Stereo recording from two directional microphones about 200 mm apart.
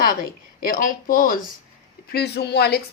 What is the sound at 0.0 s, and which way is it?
Speech, 45° left (ahead or behind).